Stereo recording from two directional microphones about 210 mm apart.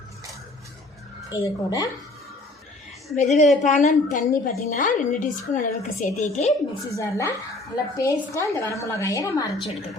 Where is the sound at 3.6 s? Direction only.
35° left (ahead or behind).